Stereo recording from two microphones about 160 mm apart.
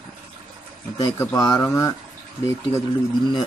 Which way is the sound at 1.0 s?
20° left (ahead or behind).